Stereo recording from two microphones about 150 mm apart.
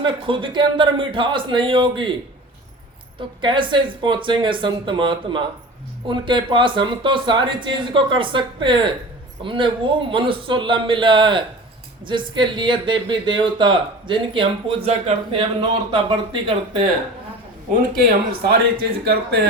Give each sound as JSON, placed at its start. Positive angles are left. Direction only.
{"t": 0.0, "sound": "speech", "side_deg": -35}
{"t": 3.2, "sound": "speech", "side_deg": -35}
{"t": 18.4, "sound": "a man's voice", "side_deg": -90}